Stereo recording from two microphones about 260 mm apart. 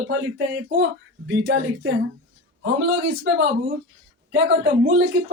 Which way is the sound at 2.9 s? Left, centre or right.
Right.